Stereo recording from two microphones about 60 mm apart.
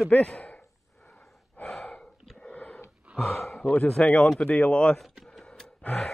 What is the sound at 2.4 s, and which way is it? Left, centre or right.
Sniff, centre.